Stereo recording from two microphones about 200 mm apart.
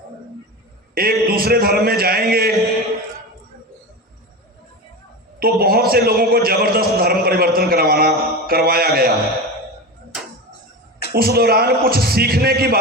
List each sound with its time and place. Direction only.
0.9 s a man's voice: 50° right (ahead or behind)
5.4 s a man's voice: 50° right (ahead or behind)
11.1 s a man's voice: 50° right (ahead or behind)